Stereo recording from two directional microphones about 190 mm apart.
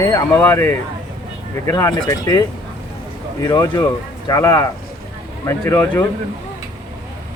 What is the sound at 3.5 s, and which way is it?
Speech, 20° left (ahead or behind).